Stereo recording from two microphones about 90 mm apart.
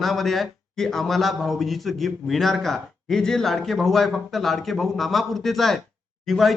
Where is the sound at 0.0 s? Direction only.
Centre (ahead or behind).